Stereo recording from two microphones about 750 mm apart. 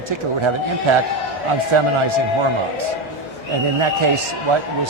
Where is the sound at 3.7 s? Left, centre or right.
Right.